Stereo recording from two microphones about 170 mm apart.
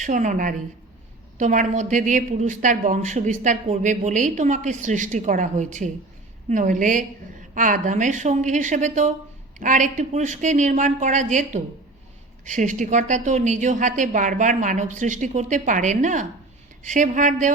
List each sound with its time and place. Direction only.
0.0 s a woman's voice: 45° right (ahead or behind)